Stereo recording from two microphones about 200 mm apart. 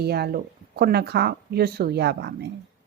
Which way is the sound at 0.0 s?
55° right (ahead or behind).